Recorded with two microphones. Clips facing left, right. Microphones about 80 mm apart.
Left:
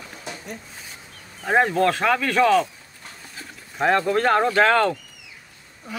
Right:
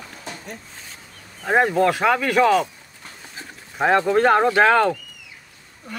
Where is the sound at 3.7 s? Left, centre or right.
Centre.